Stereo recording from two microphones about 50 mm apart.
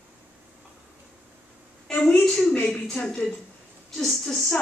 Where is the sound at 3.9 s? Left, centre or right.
Centre.